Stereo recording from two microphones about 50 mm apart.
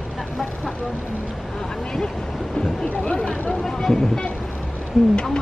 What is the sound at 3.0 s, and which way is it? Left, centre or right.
Speech, centre.